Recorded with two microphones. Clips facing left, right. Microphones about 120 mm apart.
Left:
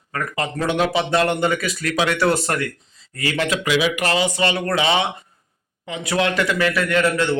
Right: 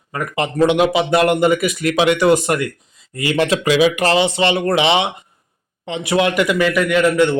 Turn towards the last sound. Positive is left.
turn(degrees=-15)  # may be behind; listen again after turning